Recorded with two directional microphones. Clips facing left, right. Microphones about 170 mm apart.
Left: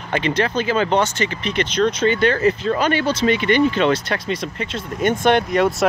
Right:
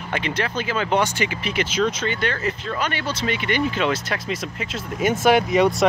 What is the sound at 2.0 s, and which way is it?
Speech, 35° left (ahead or behind).